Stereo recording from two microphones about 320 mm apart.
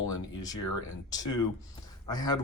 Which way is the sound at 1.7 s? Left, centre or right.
Centre.